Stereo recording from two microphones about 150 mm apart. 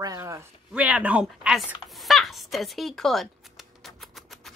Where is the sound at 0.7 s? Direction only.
10° right (ahead or behind).